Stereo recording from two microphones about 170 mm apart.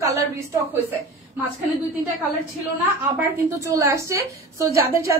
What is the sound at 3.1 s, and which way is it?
A woman's voice, 20° right (ahead or behind).